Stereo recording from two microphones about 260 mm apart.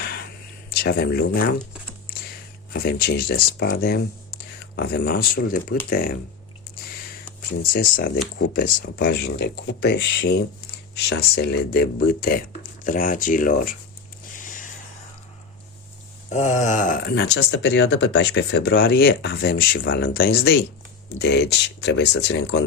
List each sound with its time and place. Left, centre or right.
0.7 s speech: left
2.7 s speech: left
7.6 s speech: left
16.3 s speech: left